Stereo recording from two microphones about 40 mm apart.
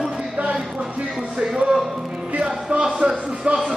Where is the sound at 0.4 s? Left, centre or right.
Right.